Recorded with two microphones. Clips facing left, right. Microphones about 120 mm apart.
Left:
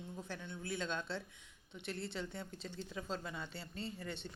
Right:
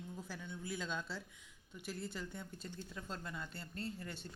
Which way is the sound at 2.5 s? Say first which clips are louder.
Left 2 dB; 90° left.